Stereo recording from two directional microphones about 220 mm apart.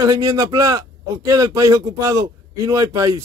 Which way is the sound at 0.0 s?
15° right (ahead or behind).